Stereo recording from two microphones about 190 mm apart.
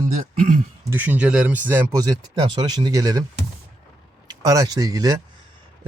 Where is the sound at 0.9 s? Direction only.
10° right (ahead or behind).